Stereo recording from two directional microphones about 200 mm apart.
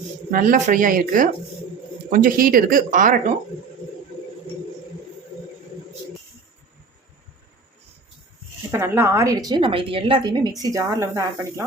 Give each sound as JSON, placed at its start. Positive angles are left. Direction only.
{"t": 0.3, "sound": "speech", "side_deg": -45}
{"t": 8.7, "sound": "a woman's voice", "side_deg": -15}